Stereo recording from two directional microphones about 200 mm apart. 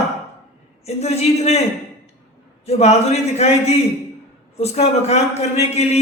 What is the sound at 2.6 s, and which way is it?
Speech, 30° left (ahead or behind).